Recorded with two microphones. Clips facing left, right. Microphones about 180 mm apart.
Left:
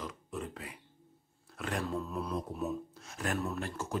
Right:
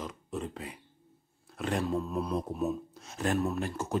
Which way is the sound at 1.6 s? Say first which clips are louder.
Right 5 dB; 20° right (ahead or behind).